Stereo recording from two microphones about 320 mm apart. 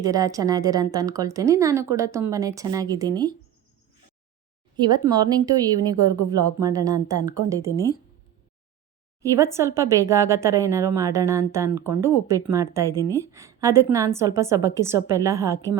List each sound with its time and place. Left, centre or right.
0.0 s a woman's voice: centre
4.8 s a woman's voice: centre
9.3 s a woman's voice: centre